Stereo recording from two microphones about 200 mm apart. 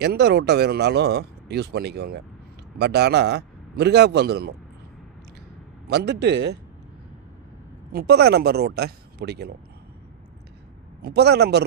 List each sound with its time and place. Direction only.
0.0 s speech: 55° right (ahead or behind)
5.9 s speech: 60° right (ahead or behind)
7.9 s speech: 50° right (ahead or behind)
11.0 s speech: 55° right (ahead or behind)